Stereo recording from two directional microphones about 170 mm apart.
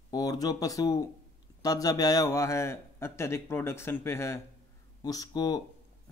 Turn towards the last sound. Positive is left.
turn(degrees=20)  # may be behind; listen again after turning